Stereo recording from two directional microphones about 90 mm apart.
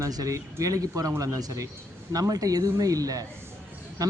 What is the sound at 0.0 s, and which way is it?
Speech, 40° right (ahead or behind).